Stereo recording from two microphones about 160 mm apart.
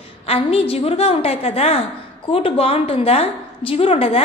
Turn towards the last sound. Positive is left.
turn(degrees=35)  # may be behind; listen again after turning